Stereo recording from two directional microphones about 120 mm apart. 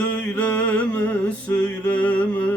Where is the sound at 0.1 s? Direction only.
10° left (ahead or behind).